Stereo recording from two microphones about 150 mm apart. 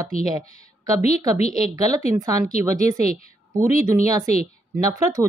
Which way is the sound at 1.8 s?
25° right (ahead or behind).